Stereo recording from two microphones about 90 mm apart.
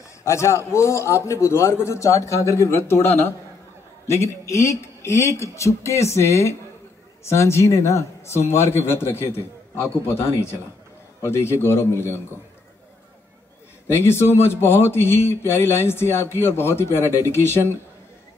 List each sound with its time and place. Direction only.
0.2 s a man's voice: 35° left (ahead or behind)
13.8 s a man's voice: 25° left (ahead or behind)